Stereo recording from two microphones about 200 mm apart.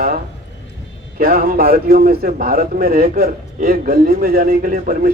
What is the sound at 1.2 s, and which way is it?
A man's voice, 45° right (ahead or behind).